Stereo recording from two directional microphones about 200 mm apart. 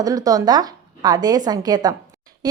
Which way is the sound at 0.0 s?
20° right (ahead or behind).